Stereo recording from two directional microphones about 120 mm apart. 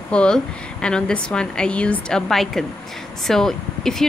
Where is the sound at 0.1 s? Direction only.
10° left (ahead or behind).